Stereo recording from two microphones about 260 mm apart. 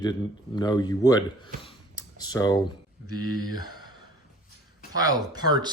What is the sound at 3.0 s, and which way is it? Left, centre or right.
Speech, right.